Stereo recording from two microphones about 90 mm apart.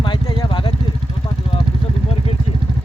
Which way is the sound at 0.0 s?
65° left (ahead or behind).